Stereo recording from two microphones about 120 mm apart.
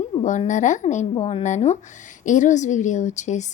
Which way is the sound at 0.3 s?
90° left.